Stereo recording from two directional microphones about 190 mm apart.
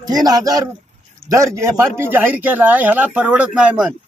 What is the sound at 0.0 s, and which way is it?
A man's voice, 20° right (ahead or behind).